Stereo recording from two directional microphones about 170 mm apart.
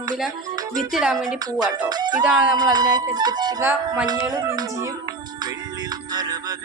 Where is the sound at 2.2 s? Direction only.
5° right (ahead or behind).